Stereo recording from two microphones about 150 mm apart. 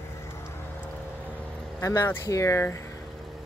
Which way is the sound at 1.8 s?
20° left (ahead or behind).